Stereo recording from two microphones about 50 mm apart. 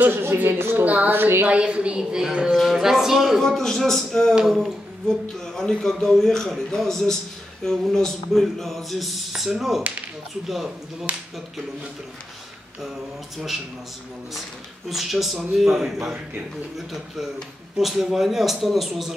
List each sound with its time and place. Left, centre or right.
0.0 s a woman's voice: right
0.8 s speech: right
1.1 s a woman's voice: right
1.5 s a woman's voice: right; by 3.4 s centre
3.4 s a man's voice: centre
4.4 s speech: centre
5.4 s a man's voice: centre
7.6 s a sound: centre
10.5 s speech: centre
14.9 s a sound: centre
15.5 s speech: centre
16.7 s a sound: centre